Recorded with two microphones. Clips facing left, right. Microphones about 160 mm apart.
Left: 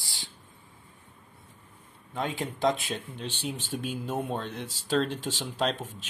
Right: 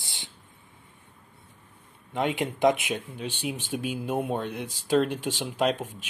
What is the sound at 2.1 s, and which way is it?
Speech, 20° right (ahead or behind).